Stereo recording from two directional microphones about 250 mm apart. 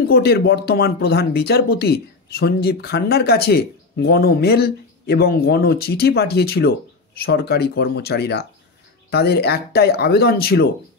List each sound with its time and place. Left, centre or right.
0.1 s speech: left